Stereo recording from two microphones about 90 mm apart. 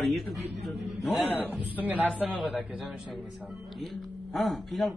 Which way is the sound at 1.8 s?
20° right (ahead or behind).